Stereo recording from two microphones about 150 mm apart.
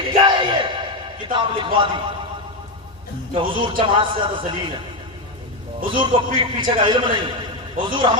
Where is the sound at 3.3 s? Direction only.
35° right (ahead or behind).